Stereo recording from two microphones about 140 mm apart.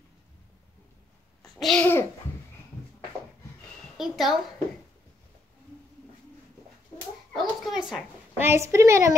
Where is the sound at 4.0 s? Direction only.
Centre (ahead or behind).